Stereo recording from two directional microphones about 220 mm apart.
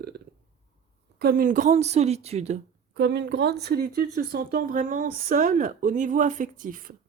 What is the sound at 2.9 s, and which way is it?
A woman's voice, 50° right (ahead or behind).